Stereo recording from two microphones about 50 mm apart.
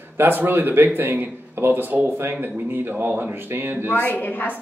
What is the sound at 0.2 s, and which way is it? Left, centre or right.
Speech, right.